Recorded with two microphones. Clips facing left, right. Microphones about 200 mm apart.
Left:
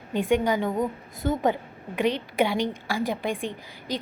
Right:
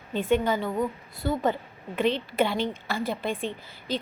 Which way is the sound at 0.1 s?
15° left (ahead or behind).